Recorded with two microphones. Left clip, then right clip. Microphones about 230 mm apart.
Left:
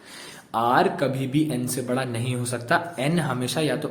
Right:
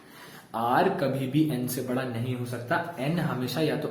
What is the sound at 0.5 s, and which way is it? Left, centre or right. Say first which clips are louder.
Speech: left 4 dB; left.